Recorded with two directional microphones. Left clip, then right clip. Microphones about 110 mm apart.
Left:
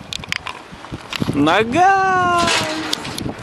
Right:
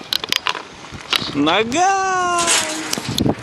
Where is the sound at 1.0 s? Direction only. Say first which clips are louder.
Even; 15° left (ahead or behind).